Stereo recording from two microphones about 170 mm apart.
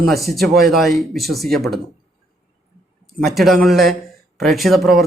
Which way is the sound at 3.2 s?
Centre (ahead or behind).